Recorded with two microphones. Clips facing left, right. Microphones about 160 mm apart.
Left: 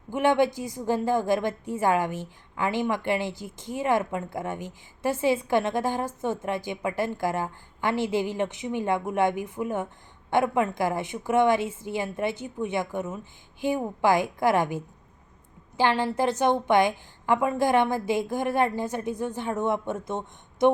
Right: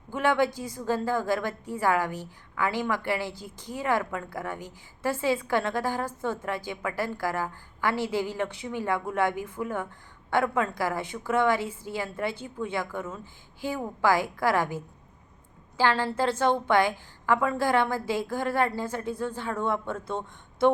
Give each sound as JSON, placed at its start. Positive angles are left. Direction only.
{"t": 0.1, "sound": "a woman's voice", "side_deg": 20}
{"t": 15.8, "sound": "a woman's voice", "side_deg": 20}